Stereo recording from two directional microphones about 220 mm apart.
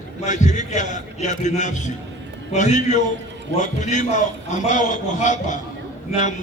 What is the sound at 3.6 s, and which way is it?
A man's voice, 35° left (ahead or behind).